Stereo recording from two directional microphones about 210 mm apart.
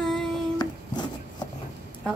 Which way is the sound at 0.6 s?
20° left (ahead or behind).